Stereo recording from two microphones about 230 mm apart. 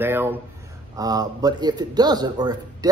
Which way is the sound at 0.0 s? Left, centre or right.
Centre.